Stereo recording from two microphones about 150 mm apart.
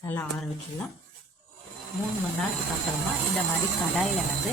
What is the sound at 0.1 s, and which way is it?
Speech, 5° left (ahead or behind).